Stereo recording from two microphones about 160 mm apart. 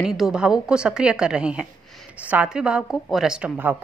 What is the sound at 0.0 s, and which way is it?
A woman's voice, 5° right (ahead or behind).